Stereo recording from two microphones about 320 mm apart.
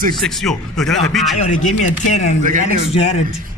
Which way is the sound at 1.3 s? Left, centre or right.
Left.